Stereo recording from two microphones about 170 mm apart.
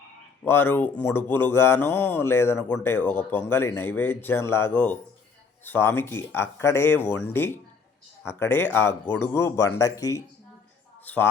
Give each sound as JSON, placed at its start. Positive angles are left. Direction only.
{"t": 0.4, "sound": "speech", "side_deg": 10}